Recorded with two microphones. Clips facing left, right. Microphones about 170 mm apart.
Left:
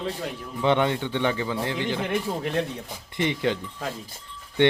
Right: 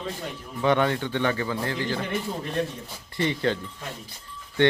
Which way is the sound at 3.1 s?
15° left (ahead or behind).